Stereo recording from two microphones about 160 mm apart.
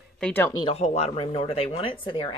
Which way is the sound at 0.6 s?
40° left (ahead or behind).